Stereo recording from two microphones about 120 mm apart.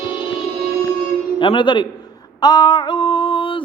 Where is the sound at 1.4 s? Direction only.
40° left (ahead or behind).